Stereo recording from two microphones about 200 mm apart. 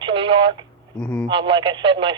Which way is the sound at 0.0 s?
25° right (ahead or behind).